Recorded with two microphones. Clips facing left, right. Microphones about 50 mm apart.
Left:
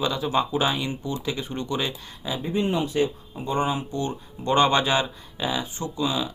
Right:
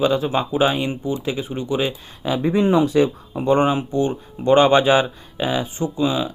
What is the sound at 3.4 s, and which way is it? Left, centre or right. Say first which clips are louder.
Speech: right 8 dB; right.